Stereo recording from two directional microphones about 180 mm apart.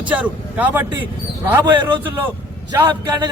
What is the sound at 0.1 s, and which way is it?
Speech, 10° right (ahead or behind).